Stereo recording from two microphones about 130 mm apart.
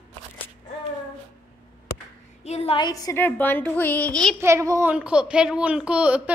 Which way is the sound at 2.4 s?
55° left (ahead or behind).